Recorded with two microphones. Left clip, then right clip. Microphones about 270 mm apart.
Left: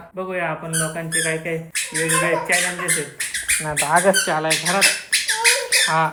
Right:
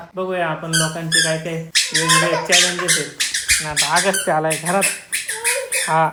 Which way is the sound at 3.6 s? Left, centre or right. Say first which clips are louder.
Left 4 dB; centre.